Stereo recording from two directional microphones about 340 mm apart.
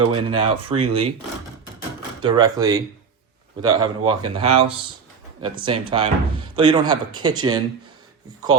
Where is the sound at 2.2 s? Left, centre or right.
Centre.